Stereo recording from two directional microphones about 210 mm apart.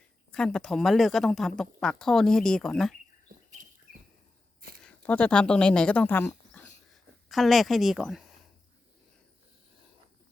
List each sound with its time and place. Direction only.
0.3 s speech: 5° left (ahead or behind)
3.6 s bird: 35° right (ahead or behind)
4.8 s speech: 5° left (ahead or behind)